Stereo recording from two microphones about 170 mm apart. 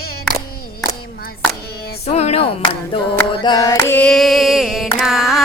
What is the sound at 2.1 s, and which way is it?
Music, 40° left (ahead or behind).